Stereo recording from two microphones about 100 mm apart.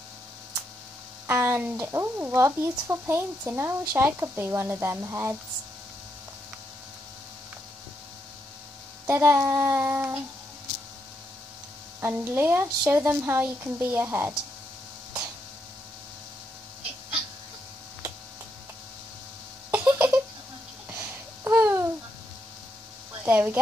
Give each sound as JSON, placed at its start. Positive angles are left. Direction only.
{"t": 1.2, "sound": "speech", "side_deg": -20}
{"t": 9.0, "sound": "speech", "side_deg": -20}
{"t": 12.0, "sound": "speech", "side_deg": -20}
{"t": 19.7, "sound": "a sound", "side_deg": -20}
{"t": 20.9, "sound": "babbling", "side_deg": -20}
{"t": 23.2, "sound": "speech", "side_deg": -20}